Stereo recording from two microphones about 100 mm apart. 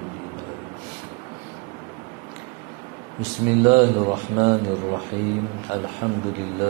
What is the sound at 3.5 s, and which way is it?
A man's voice, 20° right (ahead or behind).